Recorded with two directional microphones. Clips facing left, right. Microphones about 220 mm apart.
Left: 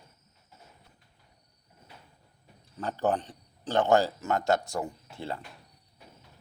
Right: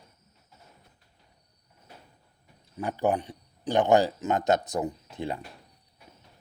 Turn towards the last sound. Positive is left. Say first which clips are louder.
# right 4 dB
turn(degrees=-15)  # may be behind; listen again after turning